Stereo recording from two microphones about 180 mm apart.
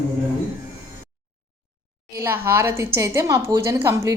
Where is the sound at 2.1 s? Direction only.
10° right (ahead or behind).